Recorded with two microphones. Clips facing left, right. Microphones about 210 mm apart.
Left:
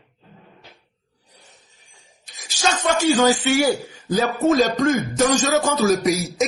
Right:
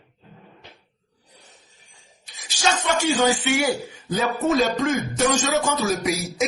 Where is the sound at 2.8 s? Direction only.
35° left (ahead or behind).